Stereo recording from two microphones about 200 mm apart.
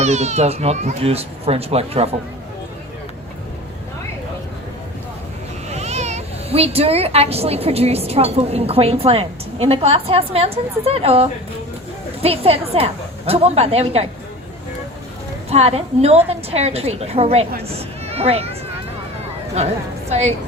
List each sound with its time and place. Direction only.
0.0 s a child's voice: 35° right (ahead or behind)
5.6 s a child's voice: 35° right (ahead or behind)
15.4 s a child's voice: 30° right (ahead or behind)
20.1 s a woman's voice: 30° right (ahead or behind)